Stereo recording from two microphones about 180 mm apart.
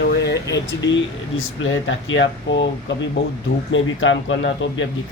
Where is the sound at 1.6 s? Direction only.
90° left.